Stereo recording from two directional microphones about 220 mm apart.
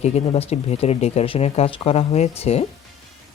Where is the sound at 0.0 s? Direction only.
30° left (ahead or behind).